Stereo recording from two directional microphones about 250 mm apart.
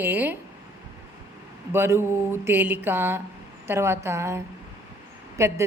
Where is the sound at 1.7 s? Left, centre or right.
Centre.